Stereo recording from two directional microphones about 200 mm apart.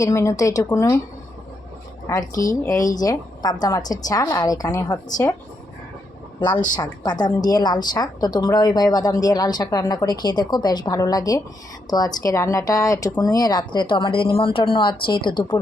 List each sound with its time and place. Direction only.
0.0 s speech: 15° left (ahead or behind)
2.3 s speech: 40° left (ahead or behind)
2.6 s a woman's voice: 15° left (ahead or behind)
6.7 s a woman's voice: 20° left (ahead or behind)